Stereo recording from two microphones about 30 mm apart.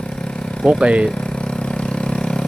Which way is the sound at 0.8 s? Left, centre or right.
Right.